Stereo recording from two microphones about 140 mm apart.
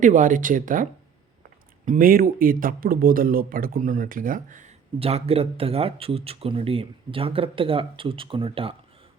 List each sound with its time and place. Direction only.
0.0 s speech: 70° right (ahead or behind)
4.9 s speech: 45° right (ahead or behind)